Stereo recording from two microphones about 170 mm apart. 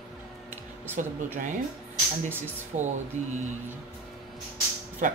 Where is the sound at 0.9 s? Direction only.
45° right (ahead or behind).